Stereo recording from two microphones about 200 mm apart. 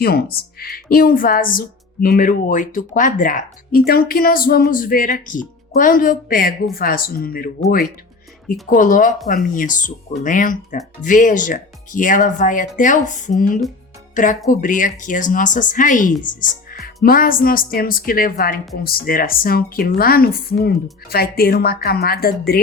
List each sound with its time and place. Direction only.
0.0 s speech: 50° left (ahead or behind)
8.7 s speech: 40° left (ahead or behind)